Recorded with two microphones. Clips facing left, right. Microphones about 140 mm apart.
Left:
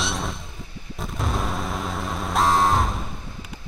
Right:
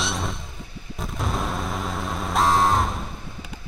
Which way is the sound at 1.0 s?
Centre (ahead or behind).